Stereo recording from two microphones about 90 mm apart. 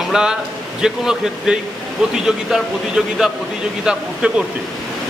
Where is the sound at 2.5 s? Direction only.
5° right (ahead or behind).